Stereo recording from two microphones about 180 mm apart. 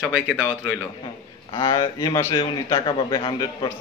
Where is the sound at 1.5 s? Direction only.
25° left (ahead or behind).